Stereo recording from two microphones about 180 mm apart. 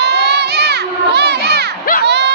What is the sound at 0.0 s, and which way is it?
Crowd, 70° right (ahead or behind).